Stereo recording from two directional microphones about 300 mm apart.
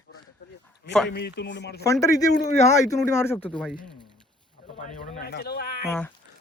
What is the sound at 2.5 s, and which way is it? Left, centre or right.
Speech, left.